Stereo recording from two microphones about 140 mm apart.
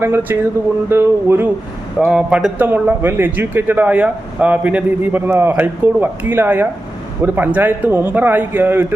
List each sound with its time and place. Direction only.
0.0 s a man's voice: 15° right (ahead or behind)
2.0 s a man's voice: 5° right (ahead or behind)